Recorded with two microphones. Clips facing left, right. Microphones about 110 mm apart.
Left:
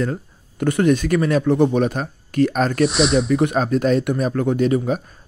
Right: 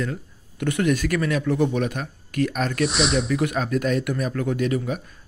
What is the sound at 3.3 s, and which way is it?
Speech, 35° left (ahead or behind).